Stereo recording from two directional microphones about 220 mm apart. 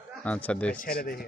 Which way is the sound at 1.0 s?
40° left (ahead or behind).